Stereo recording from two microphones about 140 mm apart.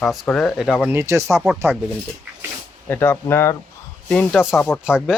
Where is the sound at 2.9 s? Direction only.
15° left (ahead or behind).